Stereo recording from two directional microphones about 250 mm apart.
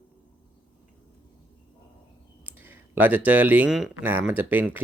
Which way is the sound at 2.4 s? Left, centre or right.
Centre.